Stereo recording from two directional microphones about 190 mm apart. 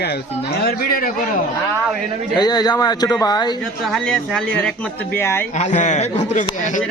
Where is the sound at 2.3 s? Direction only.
20° left (ahead or behind).